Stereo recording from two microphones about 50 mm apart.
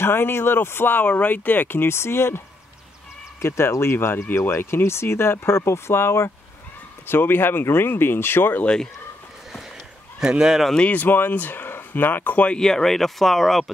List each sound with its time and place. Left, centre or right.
0.0 s speech: left
3.4 s speech: left
7.1 s speech: left
10.2 s speech: centre
10.9 s speech: left
12.5 s speech: centre